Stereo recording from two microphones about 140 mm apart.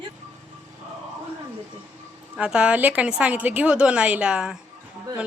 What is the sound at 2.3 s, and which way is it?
A woman's voice, 5° right (ahead or behind).